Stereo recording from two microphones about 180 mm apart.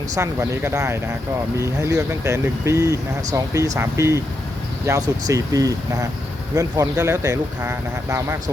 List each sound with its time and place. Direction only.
0.2 s speech: 15° right (ahead or behind)